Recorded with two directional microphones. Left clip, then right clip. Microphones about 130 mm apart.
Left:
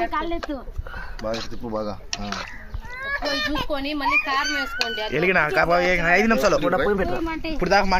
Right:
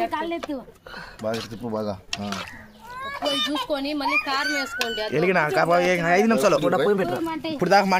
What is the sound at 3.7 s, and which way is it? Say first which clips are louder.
Speech: left 1 dB; 75° right (ahead or behind).